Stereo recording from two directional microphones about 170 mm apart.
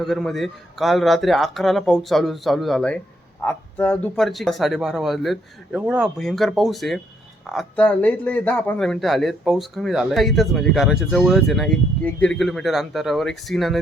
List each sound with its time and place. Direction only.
0.0 s a man's voice: centre (ahead or behind)